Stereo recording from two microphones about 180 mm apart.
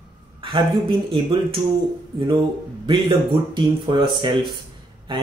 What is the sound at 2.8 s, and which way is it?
Speech, 25° right (ahead or behind).